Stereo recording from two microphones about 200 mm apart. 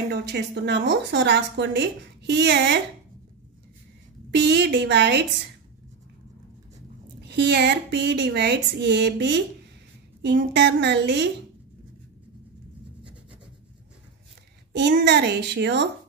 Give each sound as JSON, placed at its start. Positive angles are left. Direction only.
{"t": 0.1, "sound": "a woman's voice", "side_deg": -55}
{"t": 4.3, "sound": "a woman's voice", "side_deg": -60}
{"t": 7.2, "sound": "a woman's voice", "side_deg": -60}
{"t": 14.8, "sound": "a woman's voice", "side_deg": -60}